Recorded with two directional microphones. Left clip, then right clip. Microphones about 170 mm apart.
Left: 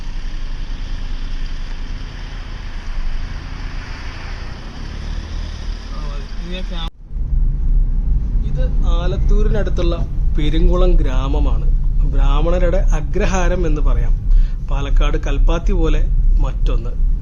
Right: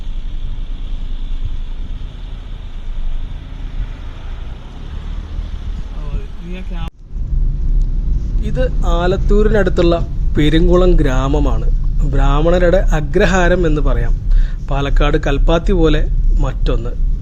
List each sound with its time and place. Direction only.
8.5 s speech: 40° right (ahead or behind)
11.3 s speech: 20° right (ahead or behind)
12.1 s speech: 30° right (ahead or behind)